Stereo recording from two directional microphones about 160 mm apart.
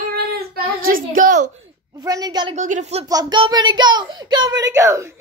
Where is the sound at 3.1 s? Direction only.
25° right (ahead or behind).